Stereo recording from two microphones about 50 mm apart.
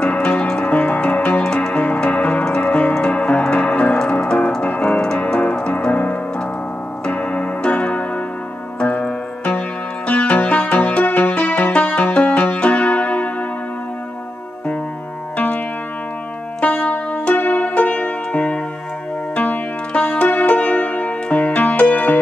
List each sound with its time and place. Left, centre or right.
0.0 s music: left
1.4 s music: centre
1.7 s music: left
4.6 s keyboard: left
5.2 s music: left
9.0 s music: left
15.3 s music: left
16.6 s music: left